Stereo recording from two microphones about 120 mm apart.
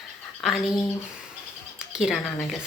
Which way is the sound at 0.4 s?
Centre (ahead or behind).